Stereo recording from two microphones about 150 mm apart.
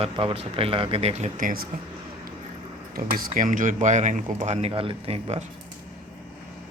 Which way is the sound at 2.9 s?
70° right (ahead or behind).